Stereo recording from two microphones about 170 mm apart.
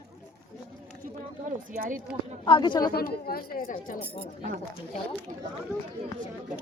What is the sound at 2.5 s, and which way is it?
Speech, 25° left (ahead or behind).